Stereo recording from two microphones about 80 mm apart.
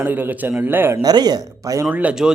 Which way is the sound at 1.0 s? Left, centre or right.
Right.